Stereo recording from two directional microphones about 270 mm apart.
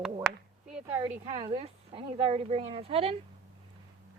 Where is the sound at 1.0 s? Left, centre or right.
Centre.